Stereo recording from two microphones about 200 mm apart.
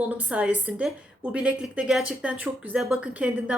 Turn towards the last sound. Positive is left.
turn(degrees=-5)  # may be behind; listen again after turning